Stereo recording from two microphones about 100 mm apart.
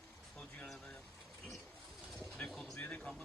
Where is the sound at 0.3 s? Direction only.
10° left (ahead or behind).